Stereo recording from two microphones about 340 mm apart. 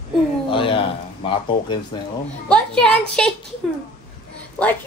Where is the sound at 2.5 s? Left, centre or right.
Centre.